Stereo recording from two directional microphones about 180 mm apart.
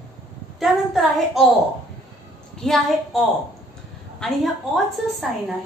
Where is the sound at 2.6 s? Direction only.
Centre (ahead or behind).